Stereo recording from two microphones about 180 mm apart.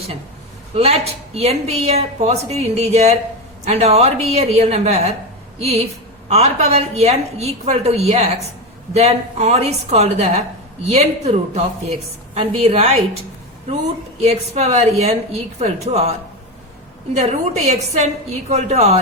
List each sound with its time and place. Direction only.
0.8 s a woman's voice: 35° right (ahead or behind)
14.2 s a woman's voice: 35° right (ahead or behind)
17.2 s a woman's voice: 35° right (ahead or behind)